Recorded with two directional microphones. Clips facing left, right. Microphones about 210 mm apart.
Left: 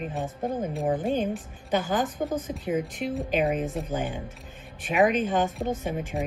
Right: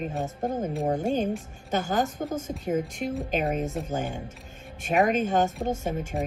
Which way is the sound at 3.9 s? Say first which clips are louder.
Even; 45° right (ahead or behind).